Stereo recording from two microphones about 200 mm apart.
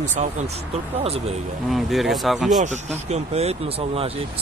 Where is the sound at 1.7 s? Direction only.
Centre (ahead or behind).